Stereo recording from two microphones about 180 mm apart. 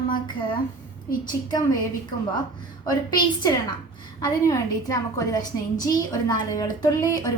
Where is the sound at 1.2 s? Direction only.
25° left (ahead or behind).